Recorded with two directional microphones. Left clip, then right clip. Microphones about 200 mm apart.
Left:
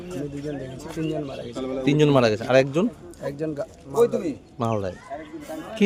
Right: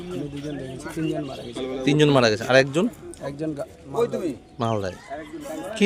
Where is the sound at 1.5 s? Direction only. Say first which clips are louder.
Even; 60° left (ahead or behind).